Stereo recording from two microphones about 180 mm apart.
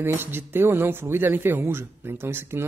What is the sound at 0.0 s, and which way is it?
Speech, 10° right (ahead or behind).